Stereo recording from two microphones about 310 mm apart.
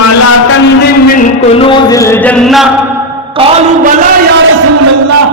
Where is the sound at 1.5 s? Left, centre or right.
Centre.